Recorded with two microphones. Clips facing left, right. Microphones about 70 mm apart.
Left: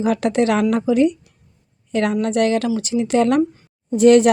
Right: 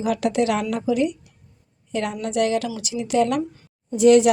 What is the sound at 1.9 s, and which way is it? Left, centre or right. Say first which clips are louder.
Speech: left 6 dB; left.